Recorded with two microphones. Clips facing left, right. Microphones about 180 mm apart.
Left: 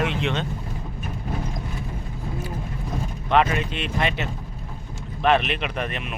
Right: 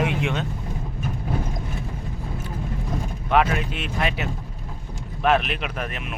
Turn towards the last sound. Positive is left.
turn(degrees=0)  # may be behind; listen again after turning